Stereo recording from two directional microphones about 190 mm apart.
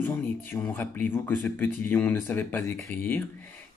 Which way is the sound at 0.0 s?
10° left (ahead or behind).